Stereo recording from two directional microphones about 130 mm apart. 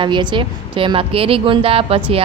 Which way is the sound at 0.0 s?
35° right (ahead or behind).